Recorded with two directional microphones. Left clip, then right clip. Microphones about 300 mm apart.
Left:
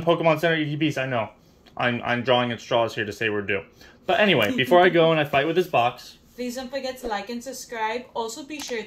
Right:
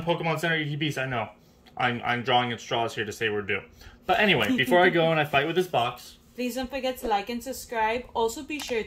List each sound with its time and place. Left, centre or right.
0.0 s speech: centre
6.3 s a woman's voice: right